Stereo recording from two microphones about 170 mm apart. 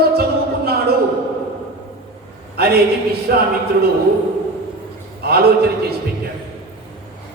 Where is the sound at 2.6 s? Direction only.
65° right (ahead or behind).